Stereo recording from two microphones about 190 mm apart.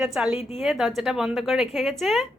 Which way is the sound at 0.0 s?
5° right (ahead or behind).